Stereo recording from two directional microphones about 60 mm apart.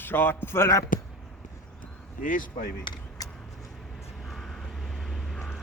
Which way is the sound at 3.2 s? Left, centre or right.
Left.